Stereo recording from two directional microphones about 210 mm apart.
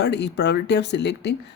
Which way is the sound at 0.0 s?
55° left (ahead or behind).